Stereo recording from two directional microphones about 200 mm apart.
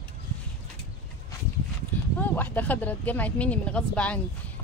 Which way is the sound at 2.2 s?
10° left (ahead or behind).